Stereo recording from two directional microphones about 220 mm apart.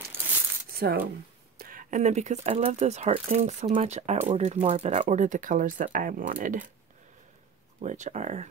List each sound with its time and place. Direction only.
0.7 s speech: 45° right (ahead or behind)
7.8 s speech: 35° right (ahead or behind)